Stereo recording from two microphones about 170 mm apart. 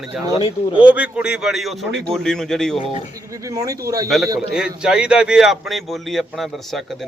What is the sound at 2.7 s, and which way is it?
Speech, 35° left (ahead or behind).